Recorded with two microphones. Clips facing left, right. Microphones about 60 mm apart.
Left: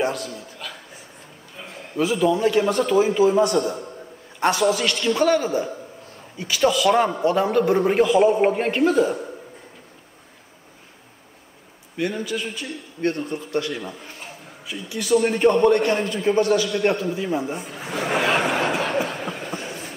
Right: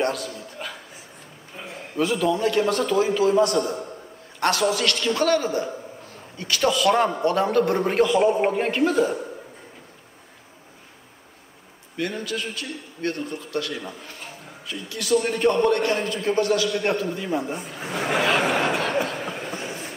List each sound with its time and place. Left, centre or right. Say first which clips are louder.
0.0 s a man's voice: left 1 dB; centre
0.6 s speech: right 2 dB; right
1.7 s a sound: left 1 dB; centre
2.3 s a man's voice: left 2 dB; centre
4.6 s a man's voice: left 2 dB; centre
12.0 s a man's voice: left 2 dB; centre
13.0 s speech: left 4 dB; left
13.7 s a man's voice: left 2 dB; centre
14.7 s a man's voice: left 2 dB; centre
18.4 s a sound: even; centre